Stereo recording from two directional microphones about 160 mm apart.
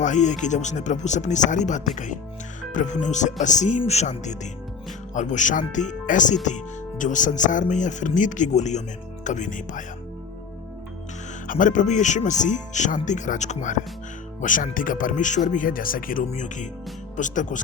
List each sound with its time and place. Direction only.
0.0 s speech: 50° left (ahead or behind)
11.4 s speech: 55° left (ahead or behind)